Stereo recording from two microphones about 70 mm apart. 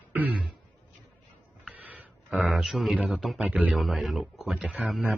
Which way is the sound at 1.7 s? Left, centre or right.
Right.